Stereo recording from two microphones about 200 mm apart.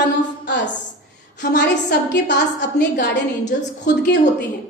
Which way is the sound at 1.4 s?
60° left (ahead or behind).